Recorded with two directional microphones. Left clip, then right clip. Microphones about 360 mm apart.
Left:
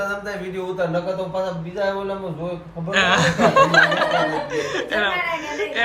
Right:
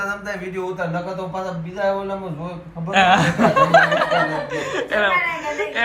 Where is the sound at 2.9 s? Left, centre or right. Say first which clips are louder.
Right 2 dB; centre.